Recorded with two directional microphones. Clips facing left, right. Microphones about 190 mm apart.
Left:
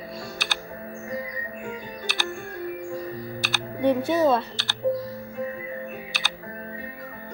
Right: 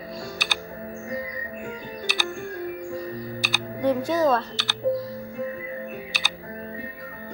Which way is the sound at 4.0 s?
25° left (ahead or behind).